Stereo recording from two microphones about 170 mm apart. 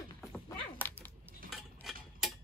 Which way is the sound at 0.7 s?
10° left (ahead or behind).